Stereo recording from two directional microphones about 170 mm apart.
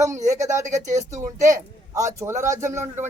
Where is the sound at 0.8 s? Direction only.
45° right (ahead or behind).